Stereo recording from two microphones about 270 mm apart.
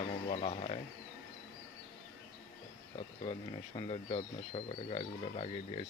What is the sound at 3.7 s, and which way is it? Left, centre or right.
Speech, centre.